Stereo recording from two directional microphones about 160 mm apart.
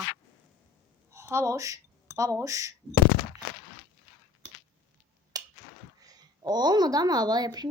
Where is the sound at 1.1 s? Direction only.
15° right (ahead or behind).